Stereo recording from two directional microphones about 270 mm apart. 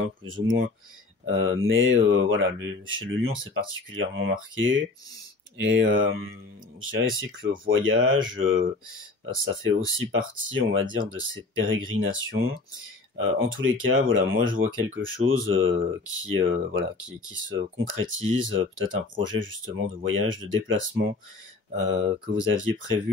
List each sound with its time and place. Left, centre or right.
0.2 s speech: right